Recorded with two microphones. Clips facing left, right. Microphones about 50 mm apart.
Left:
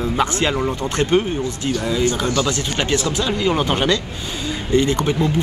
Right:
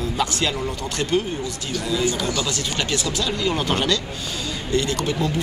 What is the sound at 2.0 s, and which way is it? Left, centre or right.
Speech, left.